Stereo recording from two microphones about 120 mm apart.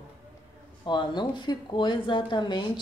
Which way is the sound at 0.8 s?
40° left (ahead or behind).